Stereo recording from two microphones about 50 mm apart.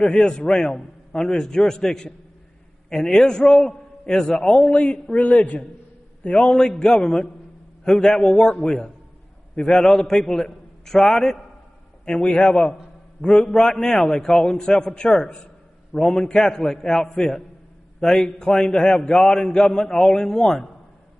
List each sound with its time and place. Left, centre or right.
0.0 s a man's voice: centre
6.3 s a man's voice: centre
9.6 s a man's voice: centre